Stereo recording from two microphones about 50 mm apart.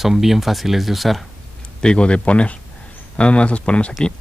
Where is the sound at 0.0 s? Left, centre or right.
Centre.